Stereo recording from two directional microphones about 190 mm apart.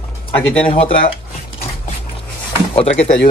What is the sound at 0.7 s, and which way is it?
Speech, 30° left (ahead or behind).